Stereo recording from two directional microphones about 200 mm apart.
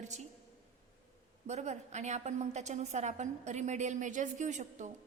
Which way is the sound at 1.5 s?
35° right (ahead or behind).